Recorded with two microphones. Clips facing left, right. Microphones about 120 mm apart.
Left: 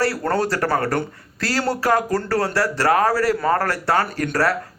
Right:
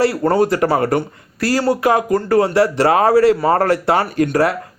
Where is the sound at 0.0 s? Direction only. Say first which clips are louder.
Right 6 dB; 20° right (ahead or behind).